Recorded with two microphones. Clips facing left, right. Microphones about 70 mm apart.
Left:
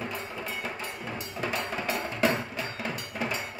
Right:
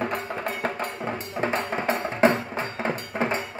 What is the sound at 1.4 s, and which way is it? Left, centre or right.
Music, right.